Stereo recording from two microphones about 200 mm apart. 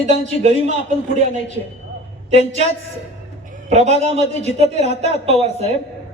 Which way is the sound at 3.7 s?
35° right (ahead or behind).